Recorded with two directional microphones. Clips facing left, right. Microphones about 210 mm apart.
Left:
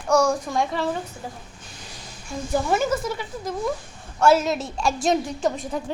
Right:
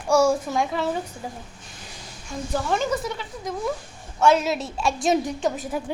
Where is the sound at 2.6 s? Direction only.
5° left (ahead or behind).